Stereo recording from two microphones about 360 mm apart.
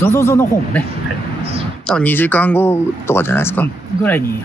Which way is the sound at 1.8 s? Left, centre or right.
Centre.